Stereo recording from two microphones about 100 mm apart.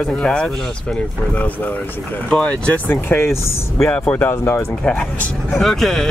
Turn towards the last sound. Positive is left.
turn(degrees=0)  # may be behind; listen again after turning